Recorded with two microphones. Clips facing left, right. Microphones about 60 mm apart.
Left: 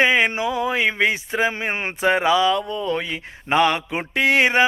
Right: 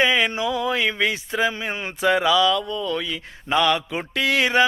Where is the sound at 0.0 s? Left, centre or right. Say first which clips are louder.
Left 2 dB; left.